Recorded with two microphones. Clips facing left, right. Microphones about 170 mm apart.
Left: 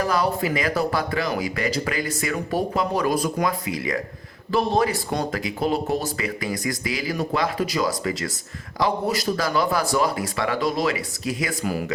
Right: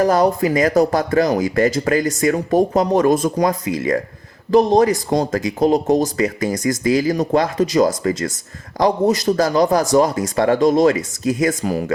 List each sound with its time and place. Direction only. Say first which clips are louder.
0.0 s speech: right 7 dB; 45° right (ahead or behind)